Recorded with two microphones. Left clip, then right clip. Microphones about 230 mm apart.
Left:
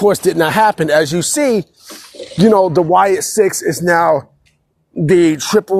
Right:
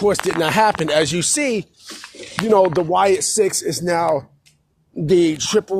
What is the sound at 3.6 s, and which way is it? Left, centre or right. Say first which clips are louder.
Speech: left 6 dB; left.